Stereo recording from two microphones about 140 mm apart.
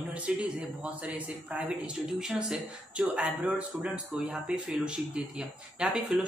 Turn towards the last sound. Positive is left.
turn(degrees=-5)  # may be behind; listen again after turning